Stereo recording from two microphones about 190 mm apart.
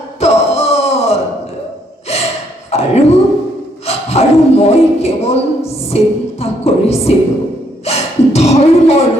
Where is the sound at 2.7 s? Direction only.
35° left (ahead or behind).